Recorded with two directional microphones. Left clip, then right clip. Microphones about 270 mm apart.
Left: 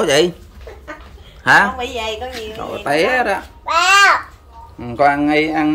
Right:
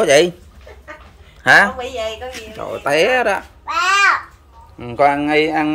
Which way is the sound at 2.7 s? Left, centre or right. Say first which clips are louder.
Right 1 dB; centre.